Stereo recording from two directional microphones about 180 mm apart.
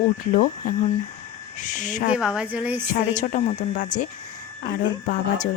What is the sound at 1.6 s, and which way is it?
Speech, 45° left (ahead or behind).